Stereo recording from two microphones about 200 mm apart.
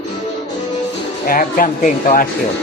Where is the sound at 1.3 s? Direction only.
45° left (ahead or behind).